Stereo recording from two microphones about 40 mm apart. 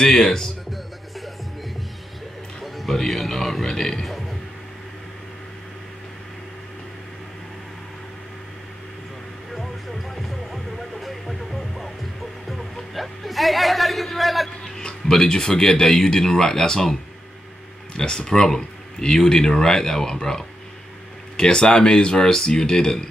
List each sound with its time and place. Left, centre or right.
0.0 s speech: centre
2.6 s music: centre
3.1 s speech: centre
3.6 s speech: centre
4.0 s burping: centre
9.6 s music: centre
12.4 s music: centre
14.8 s speech: centre
17.9 s speech: centre